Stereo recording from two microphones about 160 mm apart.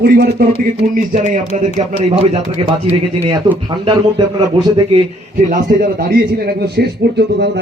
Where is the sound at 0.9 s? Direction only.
50° right (ahead or behind); by 5.0 s 30° right (ahead or behind).